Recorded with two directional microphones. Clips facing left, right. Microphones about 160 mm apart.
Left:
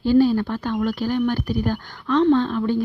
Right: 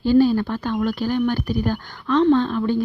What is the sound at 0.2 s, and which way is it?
Speech, 20° right (ahead or behind).